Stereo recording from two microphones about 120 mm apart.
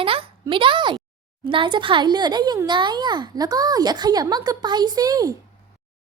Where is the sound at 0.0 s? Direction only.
50° right (ahead or behind).